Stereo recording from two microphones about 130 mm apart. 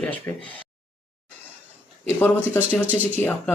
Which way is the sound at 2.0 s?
15° left (ahead or behind).